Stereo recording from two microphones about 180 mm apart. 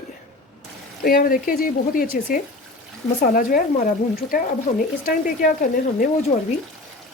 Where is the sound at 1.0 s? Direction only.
55° left (ahead or behind).